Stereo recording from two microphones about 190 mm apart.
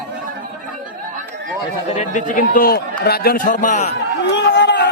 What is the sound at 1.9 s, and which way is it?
Speech, 45° left (ahead or behind).